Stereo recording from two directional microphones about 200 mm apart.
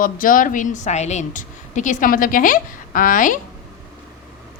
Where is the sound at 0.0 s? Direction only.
45° left (ahead or behind).